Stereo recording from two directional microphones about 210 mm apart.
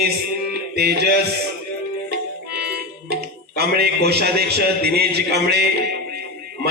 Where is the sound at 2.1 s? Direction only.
50° right (ahead or behind).